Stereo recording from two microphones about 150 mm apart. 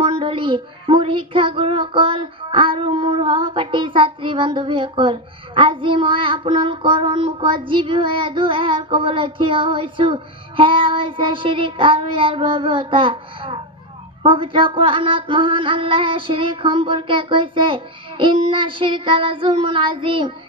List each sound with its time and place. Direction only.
0.0 s speech: 35° right (ahead or behind)